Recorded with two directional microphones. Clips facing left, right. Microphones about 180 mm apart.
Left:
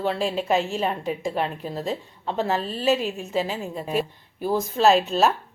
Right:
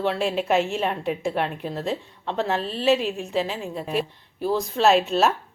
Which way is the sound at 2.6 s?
40° left (ahead or behind).